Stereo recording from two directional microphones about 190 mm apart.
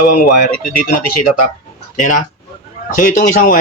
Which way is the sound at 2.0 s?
40° left (ahead or behind).